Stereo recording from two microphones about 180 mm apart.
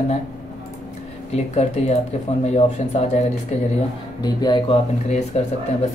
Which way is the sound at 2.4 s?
35° left (ahead or behind).